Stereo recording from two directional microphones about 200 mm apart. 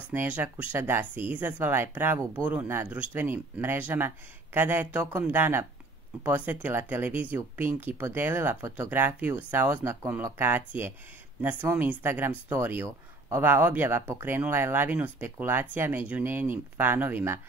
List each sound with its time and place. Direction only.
0.1 s speech: 10° right (ahead or behind)